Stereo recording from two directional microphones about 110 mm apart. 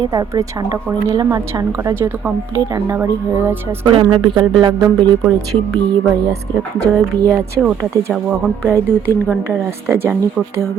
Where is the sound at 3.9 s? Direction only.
50° right (ahead or behind).